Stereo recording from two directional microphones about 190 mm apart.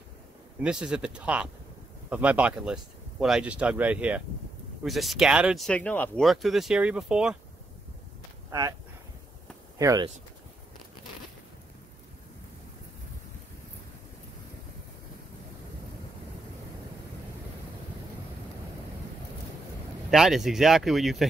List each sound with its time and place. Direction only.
0.6 s speech: 5° right (ahead or behind)
8.5 s speech: 20° right (ahead or behind)
9.8 s speech: 15° right (ahead or behind)
20.1 s speech: centre (ahead or behind)